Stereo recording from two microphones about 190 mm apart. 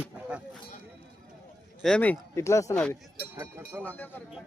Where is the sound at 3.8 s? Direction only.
10° left (ahead or behind).